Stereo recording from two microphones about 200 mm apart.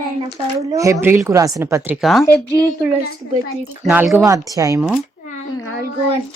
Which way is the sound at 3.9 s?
10° right (ahead or behind).